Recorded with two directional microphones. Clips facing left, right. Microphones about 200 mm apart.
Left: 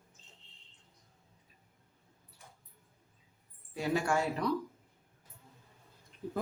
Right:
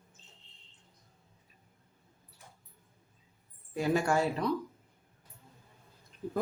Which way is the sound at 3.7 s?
40° right (ahead or behind).